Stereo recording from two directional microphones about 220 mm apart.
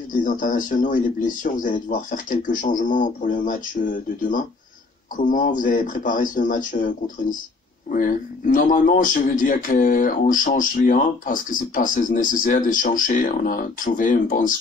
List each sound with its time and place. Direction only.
0.1 s a man's voice: 35° left (ahead or behind)